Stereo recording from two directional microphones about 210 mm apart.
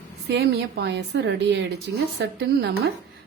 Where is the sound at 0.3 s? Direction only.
55° right (ahead or behind).